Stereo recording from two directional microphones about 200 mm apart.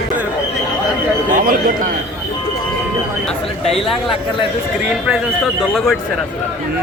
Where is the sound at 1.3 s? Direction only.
45° right (ahead or behind).